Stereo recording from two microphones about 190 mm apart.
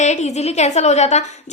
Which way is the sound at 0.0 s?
35° left (ahead or behind).